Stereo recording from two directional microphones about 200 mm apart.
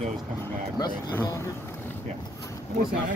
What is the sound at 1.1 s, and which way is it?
Speech, 15° left (ahead or behind).